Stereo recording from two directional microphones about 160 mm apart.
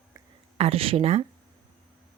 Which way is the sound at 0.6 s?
35° right (ahead or behind).